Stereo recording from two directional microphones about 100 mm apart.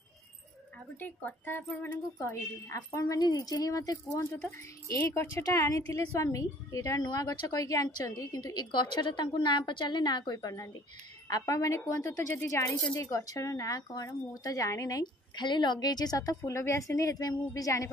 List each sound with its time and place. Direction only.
0.9 s speech: 15° left (ahead or behind)
2.1 s a woman's voice: 35° left (ahead or behind)
15.3 s a woman's voice: 50° left (ahead or behind); by 17.9 s 35° left (ahead or behind)